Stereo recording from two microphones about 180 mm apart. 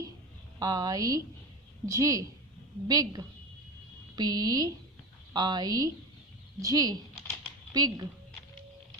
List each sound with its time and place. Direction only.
0.6 s a woman's voice: 20° right (ahead or behind)